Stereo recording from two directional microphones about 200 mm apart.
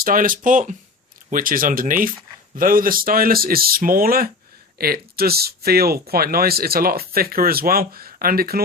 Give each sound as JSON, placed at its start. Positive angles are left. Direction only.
{"t": 0.0, "sound": "speech", "side_deg": -45}